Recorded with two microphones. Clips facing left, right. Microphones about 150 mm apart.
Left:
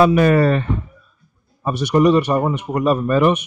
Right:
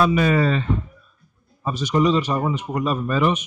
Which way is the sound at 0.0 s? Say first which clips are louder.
Left 5 dB; 55° left (ahead or behind).